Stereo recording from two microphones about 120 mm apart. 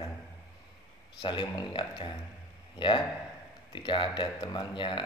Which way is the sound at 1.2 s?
40° left (ahead or behind).